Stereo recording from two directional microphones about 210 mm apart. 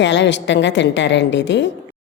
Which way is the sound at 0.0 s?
60° left (ahead or behind).